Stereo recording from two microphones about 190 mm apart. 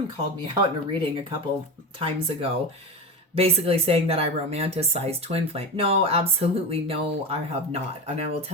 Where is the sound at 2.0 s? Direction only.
30° right (ahead or behind).